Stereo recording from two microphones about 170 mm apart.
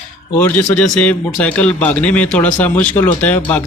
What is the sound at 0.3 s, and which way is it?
A man's voice, 10° left (ahead or behind).